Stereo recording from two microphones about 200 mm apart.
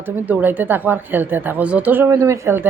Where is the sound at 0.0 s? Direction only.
10° right (ahead or behind).